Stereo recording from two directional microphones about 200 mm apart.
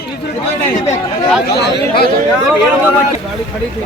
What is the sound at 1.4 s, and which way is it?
Speech, 55° left (ahead or behind).